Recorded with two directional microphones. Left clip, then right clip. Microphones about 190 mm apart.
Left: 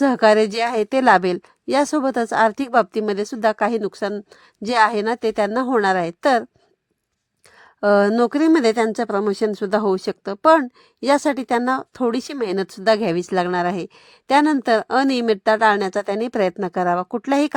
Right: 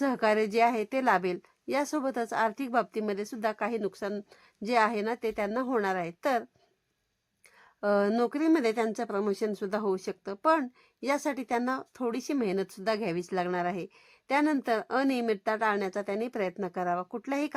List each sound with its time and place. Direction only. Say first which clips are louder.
0.0 s speech: left 12 dB; 35° left (ahead or behind)
7.8 s speech: left 11 dB; 40° left (ahead or behind)